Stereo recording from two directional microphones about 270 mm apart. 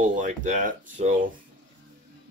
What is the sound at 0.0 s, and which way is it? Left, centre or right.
Speech, right.